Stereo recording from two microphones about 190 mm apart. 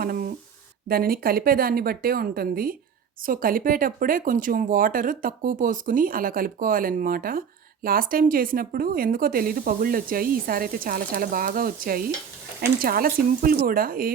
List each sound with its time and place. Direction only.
0.0 s speech: 50° right (ahead or behind)